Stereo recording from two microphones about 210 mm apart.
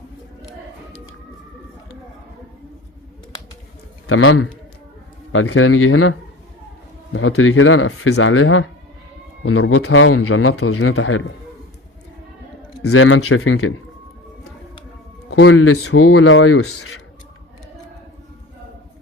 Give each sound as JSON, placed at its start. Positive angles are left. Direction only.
{"t": 4.0, "sound": "a man's voice", "side_deg": 80}
{"t": 12.8, "sound": "speech", "side_deg": 90}
{"t": 15.3, "sound": "speech", "side_deg": 75}